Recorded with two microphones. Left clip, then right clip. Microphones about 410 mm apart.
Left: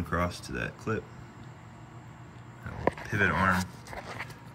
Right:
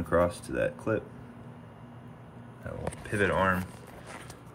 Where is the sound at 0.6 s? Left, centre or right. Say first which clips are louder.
Right 5 dB; centre.